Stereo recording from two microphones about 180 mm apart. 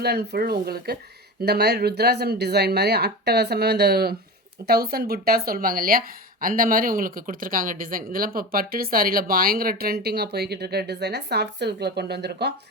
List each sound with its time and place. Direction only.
0.0 s speech: 65° right (ahead or behind)